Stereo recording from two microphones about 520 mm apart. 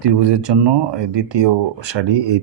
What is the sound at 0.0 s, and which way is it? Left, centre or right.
Speech, right.